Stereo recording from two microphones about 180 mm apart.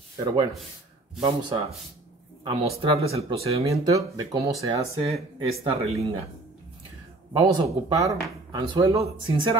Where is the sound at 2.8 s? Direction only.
35° right (ahead or behind).